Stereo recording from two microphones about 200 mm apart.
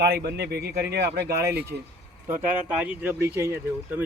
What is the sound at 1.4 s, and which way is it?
Speech, 15° right (ahead or behind).